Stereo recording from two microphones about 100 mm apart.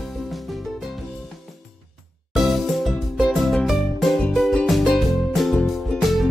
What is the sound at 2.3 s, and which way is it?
Music, centre (ahead or behind).